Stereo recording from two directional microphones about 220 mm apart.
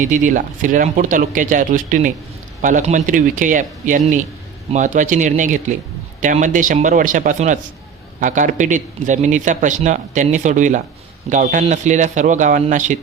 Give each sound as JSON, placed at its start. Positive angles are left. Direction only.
{"t": 0.0, "sound": "a man's voice", "side_deg": -35}